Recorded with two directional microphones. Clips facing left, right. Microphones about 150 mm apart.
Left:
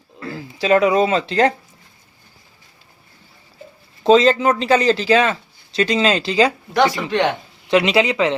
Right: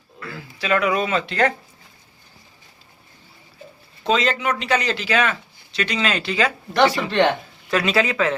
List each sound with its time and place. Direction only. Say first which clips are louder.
0.2 s speech: left 7 dB; 35° left (ahead or behind)
4.0 s speech: left 8 dB; 30° left (ahead or behind)
6.8 s speech: right 2 dB; 15° left (ahead or behind)